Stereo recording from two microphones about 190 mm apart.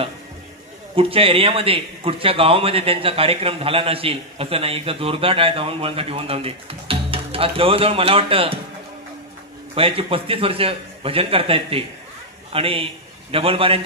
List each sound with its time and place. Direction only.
0.9 s a man's voice: 30° right (ahead or behind)
9.8 s a man's voice: 30° right (ahead or behind)